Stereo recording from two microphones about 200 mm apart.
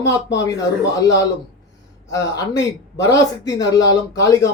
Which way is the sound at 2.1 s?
20° left (ahead or behind).